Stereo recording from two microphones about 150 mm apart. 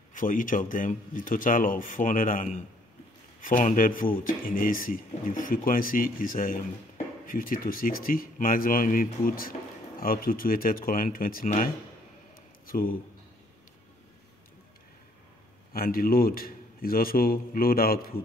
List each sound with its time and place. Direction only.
0.1 s a man's voice: 60° left (ahead or behind)
12.6 s a sound: 70° left (ahead or behind)
15.7 s a man's voice: 75° left (ahead or behind)